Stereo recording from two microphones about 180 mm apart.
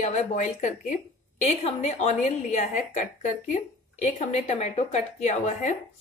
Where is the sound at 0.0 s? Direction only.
40° left (ahead or behind).